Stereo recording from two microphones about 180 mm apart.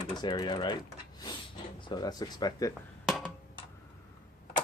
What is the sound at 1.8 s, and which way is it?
Speech, 25° left (ahead or behind).